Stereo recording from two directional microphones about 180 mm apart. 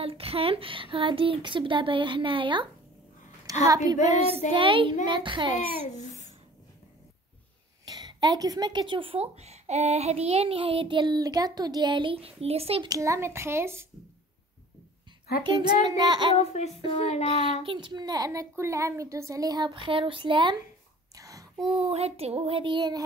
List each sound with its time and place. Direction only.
0.0 s speech: 30° right (ahead or behind)
5.9 s a sound: 40° left (ahead or behind)
7.8 s speech: 25° right (ahead or behind)
15.4 s speech: 25° right (ahead or behind)
16.3 s speech: 35° left (ahead or behind)
17.6 s speech: 25° right (ahead or behind)
21.1 s a sound: 20° right (ahead or behind)
21.6 s child singing: 30° right (ahead or behind)